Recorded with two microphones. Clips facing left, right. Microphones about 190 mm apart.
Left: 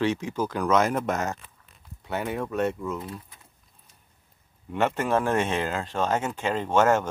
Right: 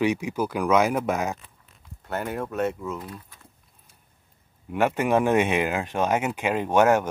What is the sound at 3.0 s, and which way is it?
Speech, 25° left (ahead or behind).